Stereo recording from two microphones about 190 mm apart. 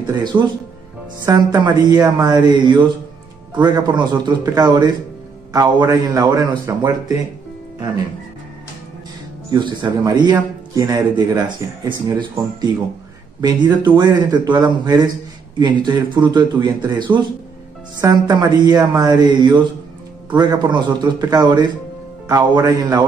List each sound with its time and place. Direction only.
0.2 s a man's voice: 25° right (ahead or behind)
9.5 s a man's voice: 20° right (ahead or behind)